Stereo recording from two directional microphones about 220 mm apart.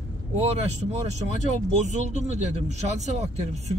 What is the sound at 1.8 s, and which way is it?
Speech, 35° right (ahead or behind).